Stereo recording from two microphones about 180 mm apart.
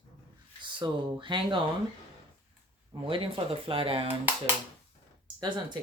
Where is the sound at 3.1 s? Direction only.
30° right (ahead or behind).